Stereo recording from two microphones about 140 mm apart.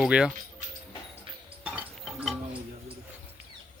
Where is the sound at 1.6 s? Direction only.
5° right (ahead or behind).